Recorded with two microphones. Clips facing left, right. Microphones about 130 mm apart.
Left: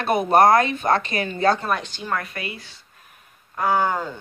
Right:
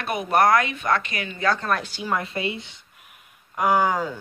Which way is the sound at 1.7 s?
5° right (ahead or behind).